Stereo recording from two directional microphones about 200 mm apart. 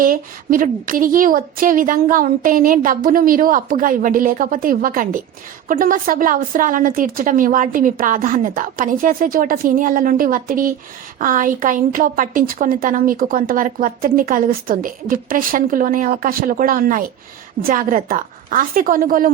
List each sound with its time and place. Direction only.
0.0 s a woman's voice: 45° right (ahead or behind)